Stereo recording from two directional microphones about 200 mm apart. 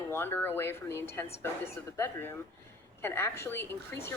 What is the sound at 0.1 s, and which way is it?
Speech, 10° left (ahead or behind).